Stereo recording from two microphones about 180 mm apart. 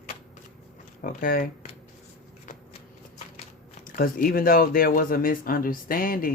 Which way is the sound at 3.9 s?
50° left (ahead or behind).